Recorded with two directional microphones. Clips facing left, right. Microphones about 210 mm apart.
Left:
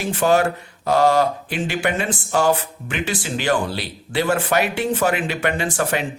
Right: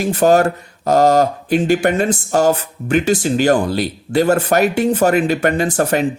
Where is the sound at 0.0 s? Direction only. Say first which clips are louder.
Right 5 dB; 40° right (ahead or behind).